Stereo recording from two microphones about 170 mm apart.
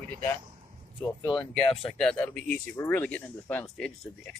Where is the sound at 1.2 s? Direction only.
20° left (ahead or behind).